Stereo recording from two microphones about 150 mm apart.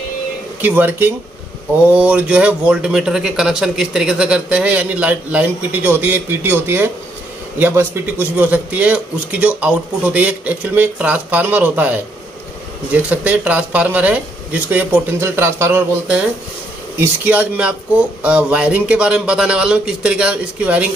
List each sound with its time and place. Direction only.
0.6 s speech: 10° right (ahead or behind)